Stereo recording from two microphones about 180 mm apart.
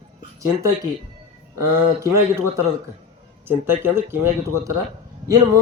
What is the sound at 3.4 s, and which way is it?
A man's voice, 10° right (ahead or behind).